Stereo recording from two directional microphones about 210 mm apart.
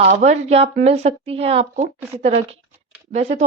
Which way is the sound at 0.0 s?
30° right (ahead or behind).